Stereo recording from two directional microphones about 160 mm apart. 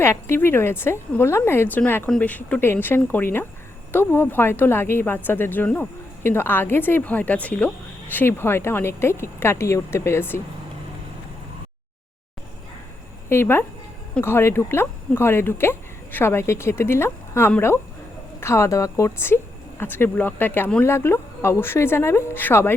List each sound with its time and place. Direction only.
0.0 s a woman's voice: 15° left (ahead or behind)
13.2 s a woman's voice: 15° left (ahead or behind)